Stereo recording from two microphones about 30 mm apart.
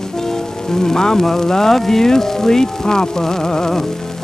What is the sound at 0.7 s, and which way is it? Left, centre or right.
Music, centre.